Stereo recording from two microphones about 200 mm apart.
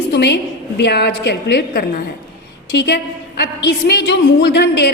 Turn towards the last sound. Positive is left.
turn(degrees=55)  # may be behind; listen again after turning